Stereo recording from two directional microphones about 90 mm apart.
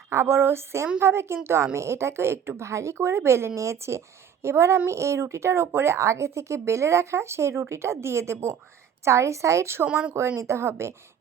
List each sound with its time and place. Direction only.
0.1 s a woman's voice: 30° right (ahead or behind)
9.8 s speech: 10° right (ahead or behind)
10.2 s speech: 30° right (ahead or behind)